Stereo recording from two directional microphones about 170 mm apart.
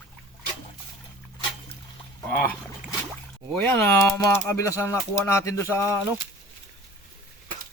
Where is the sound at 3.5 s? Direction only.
15° left (ahead or behind).